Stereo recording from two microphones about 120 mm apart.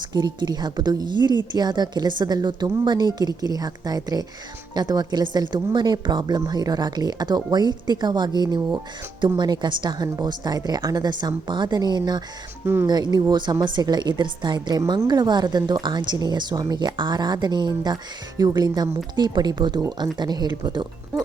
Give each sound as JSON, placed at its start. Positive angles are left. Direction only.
{"t": 0.0, "sound": "a woman's voice", "side_deg": -40}
{"t": 12.6, "sound": "speech", "side_deg": -20}
{"t": 12.9, "sound": "a woman's voice", "side_deg": -35}